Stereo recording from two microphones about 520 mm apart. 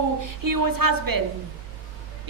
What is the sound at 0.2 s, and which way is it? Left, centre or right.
A woman's voice, right.